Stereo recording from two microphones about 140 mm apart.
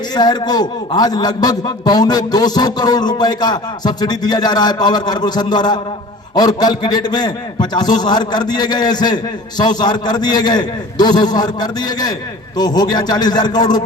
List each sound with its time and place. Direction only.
0.1 s a man's voice: 30° left (ahead or behind)